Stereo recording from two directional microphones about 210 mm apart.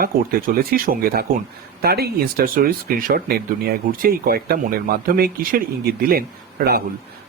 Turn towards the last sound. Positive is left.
turn(degrees=-45)  # may be behind; listen again after turning